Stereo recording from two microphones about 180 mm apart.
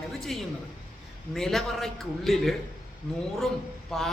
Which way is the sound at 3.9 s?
5° left (ahead or behind).